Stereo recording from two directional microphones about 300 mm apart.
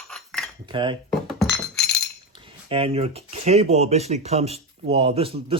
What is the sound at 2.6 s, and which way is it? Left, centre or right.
Speech, centre.